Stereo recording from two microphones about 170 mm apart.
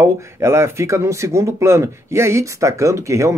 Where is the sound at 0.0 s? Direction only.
15° right (ahead or behind).